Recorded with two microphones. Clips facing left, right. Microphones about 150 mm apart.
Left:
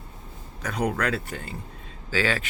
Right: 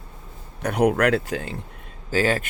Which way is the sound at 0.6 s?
65° right (ahead or behind).